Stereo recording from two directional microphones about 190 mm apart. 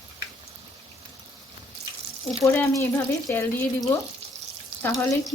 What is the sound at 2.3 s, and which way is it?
Speech, 15° left (ahead or behind).